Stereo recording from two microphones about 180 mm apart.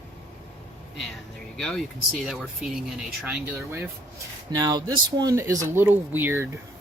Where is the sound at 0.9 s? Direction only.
Centre (ahead or behind).